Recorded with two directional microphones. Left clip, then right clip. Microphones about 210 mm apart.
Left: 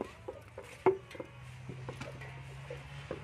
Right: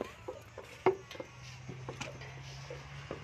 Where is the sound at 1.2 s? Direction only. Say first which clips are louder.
Even; 45° left (ahead or behind).